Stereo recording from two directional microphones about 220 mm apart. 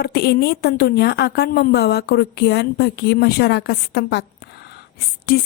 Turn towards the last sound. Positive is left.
turn(degrees=45)  # may be behind; listen again after turning